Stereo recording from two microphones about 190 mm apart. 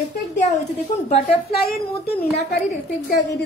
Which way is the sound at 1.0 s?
50° left (ahead or behind).